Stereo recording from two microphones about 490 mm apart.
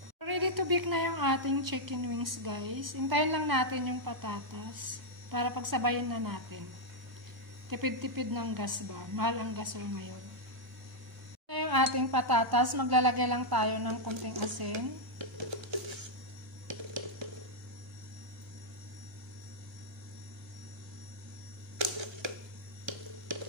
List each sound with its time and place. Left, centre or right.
0.2 s a woman's voice: right
7.7 s a woman's voice: right
11.4 s speech: right
15.1 s music: right
16.6 s a sound: right